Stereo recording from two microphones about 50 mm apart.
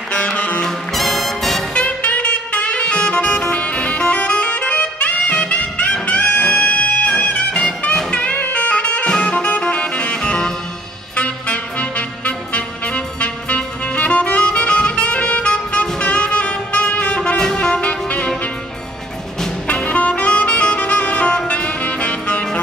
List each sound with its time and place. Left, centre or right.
0.1 s music: left
0.7 s music: centre
1.7 s saxophone: left
6.0 s music: left
11.1 s music: left
16.0 s saxophone: left
19.7 s saxophone: left
21.5 s music: left